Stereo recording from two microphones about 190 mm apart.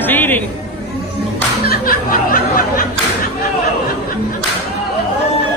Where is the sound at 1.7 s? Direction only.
50° left (ahead or behind).